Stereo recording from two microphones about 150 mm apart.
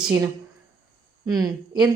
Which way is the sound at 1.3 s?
25° right (ahead or behind).